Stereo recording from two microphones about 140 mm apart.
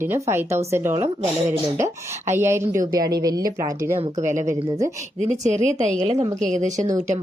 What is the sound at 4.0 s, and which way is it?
Speech, 60° right (ahead or behind).